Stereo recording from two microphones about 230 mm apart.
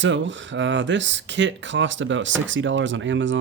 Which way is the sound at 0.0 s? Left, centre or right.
Right.